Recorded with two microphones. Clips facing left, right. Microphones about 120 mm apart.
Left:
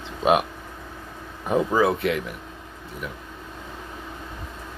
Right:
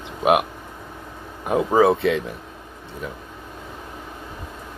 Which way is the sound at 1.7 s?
25° right (ahead or behind).